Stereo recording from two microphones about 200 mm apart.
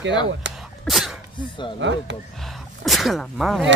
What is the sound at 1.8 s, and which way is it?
Speech, 65° right (ahead or behind).